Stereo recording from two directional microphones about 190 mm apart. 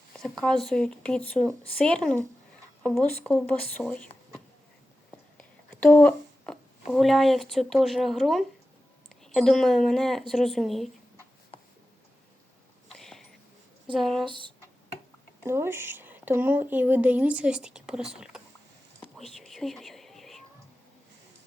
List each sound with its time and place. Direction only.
0.2 s speech: centre (ahead or behind)
5.4 s a woman's voice: 10° left (ahead or behind)
12.9 s a sound: centre (ahead or behind)
14.0 s speech: centre (ahead or behind)
14.3 s speech: 25° right (ahead or behind)
15.4 s speech: 15° right (ahead or behind)
18.2 s a sound: 5° right (ahead or behind)
18.9 s whispering: centre (ahead or behind)